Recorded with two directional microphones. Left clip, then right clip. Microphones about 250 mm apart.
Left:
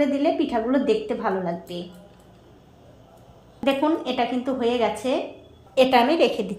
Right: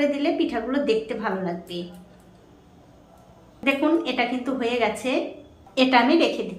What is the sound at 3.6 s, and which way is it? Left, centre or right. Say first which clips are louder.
A woman's voice: even; left.